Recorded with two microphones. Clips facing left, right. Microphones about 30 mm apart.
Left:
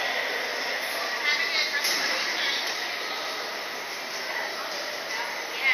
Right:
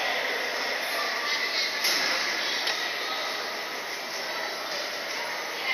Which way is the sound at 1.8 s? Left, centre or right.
Centre.